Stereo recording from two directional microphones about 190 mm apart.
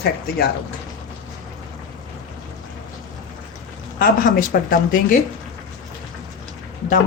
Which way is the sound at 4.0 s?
45° left (ahead or behind).